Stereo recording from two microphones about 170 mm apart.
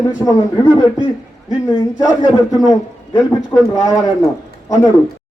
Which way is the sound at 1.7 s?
25° left (ahead or behind).